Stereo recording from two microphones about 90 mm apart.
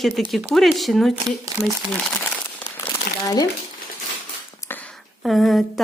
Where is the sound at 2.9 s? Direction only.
40° left (ahead or behind).